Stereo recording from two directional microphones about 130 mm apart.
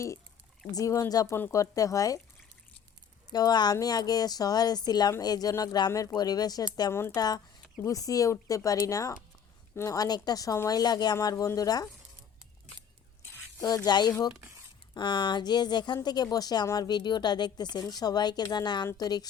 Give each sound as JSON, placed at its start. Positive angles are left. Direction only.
{"t": 0.7, "sound": "a woman's voice", "side_deg": 25}
{"t": 3.3, "sound": "a woman's voice", "side_deg": 30}
{"t": 7.2, "sound": "a woman's voice", "side_deg": 30}
{"t": 13.6, "sound": "speech", "side_deg": 30}